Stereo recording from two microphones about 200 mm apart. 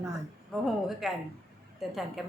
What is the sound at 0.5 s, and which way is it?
Speech, centre (ahead or behind).